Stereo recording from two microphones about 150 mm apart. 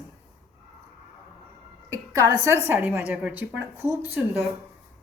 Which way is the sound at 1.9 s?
20° right (ahead or behind).